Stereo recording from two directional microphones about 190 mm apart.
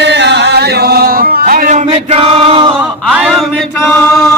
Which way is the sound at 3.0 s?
5° right (ahead or behind).